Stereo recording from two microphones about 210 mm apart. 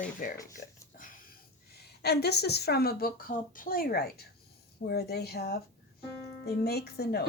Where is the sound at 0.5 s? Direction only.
40° left (ahead or behind).